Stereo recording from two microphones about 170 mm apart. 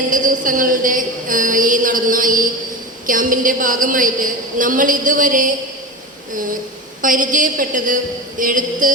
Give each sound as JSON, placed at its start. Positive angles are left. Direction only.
{"t": 0.1, "sound": "a woman's voice", "side_deg": -50}
{"t": 7.0, "sound": "a woman's voice", "side_deg": -50}